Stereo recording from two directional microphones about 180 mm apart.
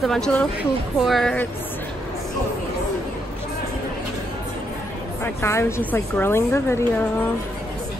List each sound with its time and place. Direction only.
0.0 s speech: 5° left (ahead or behind)
5.2 s a woman's voice: 15° left (ahead or behind)